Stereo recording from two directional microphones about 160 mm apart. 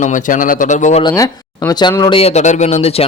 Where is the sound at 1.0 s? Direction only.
20° left (ahead or behind).